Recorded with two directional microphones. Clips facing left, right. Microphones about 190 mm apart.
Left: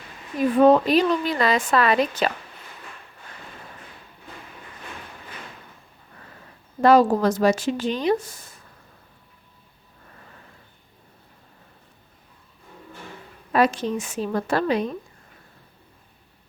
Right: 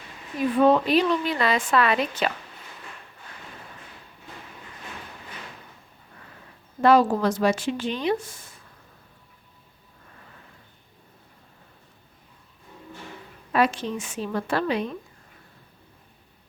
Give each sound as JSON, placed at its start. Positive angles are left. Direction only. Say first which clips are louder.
{"t": 0.6, "sound": "a woman's voice", "louder": "left 3 dB", "side_deg": 40}
{"t": 6.8, "sound": "a woman's voice", "louder": "left 2 dB", "side_deg": 40}
{"t": 13.5, "sound": "a woman's voice", "louder": "left 3 dB", "side_deg": 40}